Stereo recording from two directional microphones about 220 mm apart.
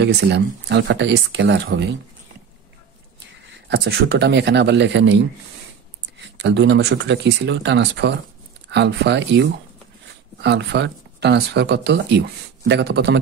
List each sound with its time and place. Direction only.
0.0 s speech: 50° right (ahead or behind)
3.6 s speech: 55° right (ahead or behind)
6.3 s speech: 50° right (ahead or behind)